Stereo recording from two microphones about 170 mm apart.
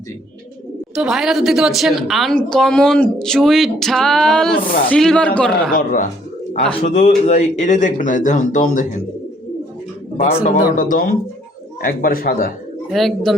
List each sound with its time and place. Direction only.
0.9 s a woman's voice: 5° right (ahead or behind)
5.7 s speech: 50° left (ahead or behind)
10.2 s a man's voice: 40° left (ahead or behind)
10.8 s a man's voice: 55° left (ahead or behind)
12.9 s a woman's voice: centre (ahead or behind)